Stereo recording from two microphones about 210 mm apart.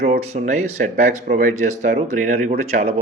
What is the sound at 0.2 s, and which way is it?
A man's voice, 35° right (ahead or behind).